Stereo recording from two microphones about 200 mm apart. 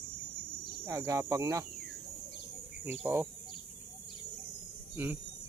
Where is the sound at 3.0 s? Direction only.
10° right (ahead or behind).